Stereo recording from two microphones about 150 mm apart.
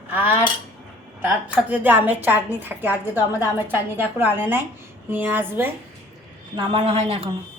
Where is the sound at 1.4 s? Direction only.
10° right (ahead or behind).